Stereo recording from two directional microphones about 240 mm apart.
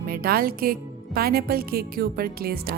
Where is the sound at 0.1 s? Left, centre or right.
Right.